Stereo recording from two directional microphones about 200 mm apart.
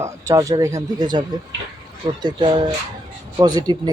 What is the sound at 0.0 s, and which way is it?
Speech, 15° right (ahead or behind).